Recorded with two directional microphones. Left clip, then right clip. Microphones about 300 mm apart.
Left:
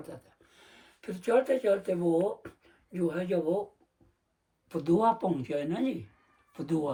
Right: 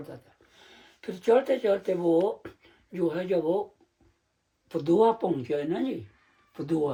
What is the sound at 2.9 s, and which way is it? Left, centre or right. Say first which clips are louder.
Speech: right 3 dB; centre.